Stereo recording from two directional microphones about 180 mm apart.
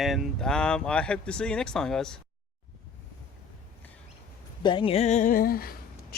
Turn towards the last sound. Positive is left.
turn(degrees=55)  # may be behind; listen again after turning